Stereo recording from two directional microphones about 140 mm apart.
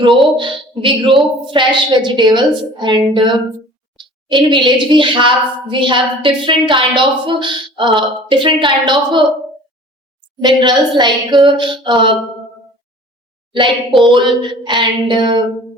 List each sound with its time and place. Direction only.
0.1 s a woman's voice: centre (ahead or behind)
0.3 s a woman's voice: 35° right (ahead or behind)
10.4 s a woman's voice: 30° right (ahead or behind)
14.1 s a woman's voice: 35° right (ahead or behind)